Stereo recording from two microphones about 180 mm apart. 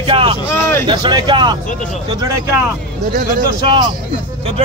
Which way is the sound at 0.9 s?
25° right (ahead or behind).